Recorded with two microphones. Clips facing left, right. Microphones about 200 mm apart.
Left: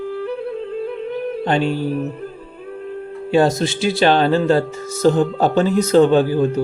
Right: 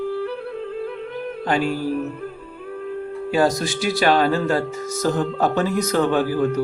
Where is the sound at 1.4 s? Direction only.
25° left (ahead or behind).